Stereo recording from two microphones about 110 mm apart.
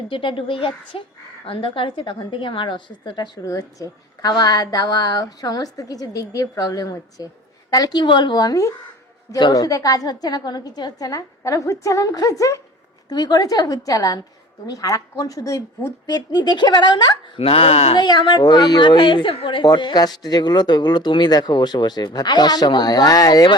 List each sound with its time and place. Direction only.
0.1 s a woman's voice: 50° left (ahead or behind)
3.4 s speech: 30° left (ahead or behind); by 17.9 s 70° left (ahead or behind)
17.9 s speech: 45° left (ahead or behind)